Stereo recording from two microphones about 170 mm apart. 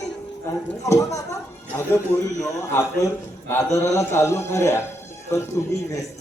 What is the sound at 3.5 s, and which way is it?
A man's voice, 15° left (ahead or behind).